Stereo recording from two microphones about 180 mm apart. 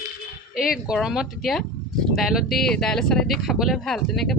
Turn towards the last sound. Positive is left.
turn(degrees=0)  # may be behind; listen again after turning